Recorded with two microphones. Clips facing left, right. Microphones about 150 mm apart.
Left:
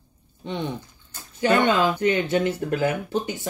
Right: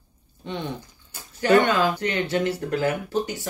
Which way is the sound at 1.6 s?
20° left (ahead or behind).